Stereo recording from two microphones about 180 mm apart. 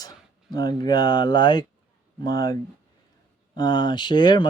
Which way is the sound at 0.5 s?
20° left (ahead or behind).